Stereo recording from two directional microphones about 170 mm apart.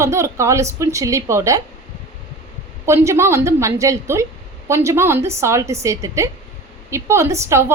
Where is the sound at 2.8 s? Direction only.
15° right (ahead or behind).